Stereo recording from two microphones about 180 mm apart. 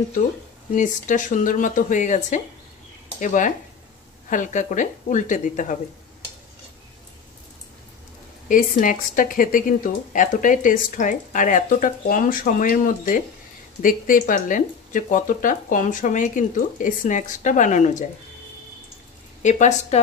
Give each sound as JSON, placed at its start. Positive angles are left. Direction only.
{"t": 0.7, "sound": "speech", "side_deg": 45}
{"t": 8.5, "sound": "speech", "side_deg": 45}
{"t": 19.4, "sound": "speech", "side_deg": 40}